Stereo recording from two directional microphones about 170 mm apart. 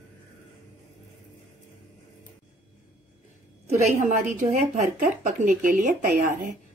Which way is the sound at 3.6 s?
50° right (ahead or behind).